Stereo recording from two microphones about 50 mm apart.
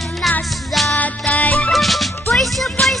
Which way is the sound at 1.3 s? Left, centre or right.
Left.